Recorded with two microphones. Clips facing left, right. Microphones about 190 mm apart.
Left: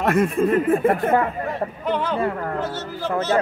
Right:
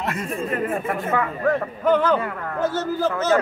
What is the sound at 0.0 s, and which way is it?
Speech, 55° left (ahead or behind).